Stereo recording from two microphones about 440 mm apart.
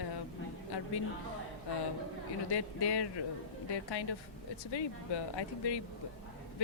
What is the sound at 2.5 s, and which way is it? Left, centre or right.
A woman's voice, left.